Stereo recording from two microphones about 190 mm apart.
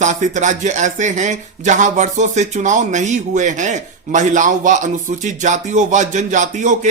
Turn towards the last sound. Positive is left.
turn(degrees=-40)  # may be behind; listen again after turning